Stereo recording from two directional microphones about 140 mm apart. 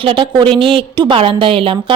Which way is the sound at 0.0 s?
40° right (ahead or behind).